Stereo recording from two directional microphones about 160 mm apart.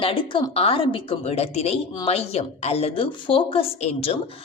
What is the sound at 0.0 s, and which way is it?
A woman's voice, 35° left (ahead or behind).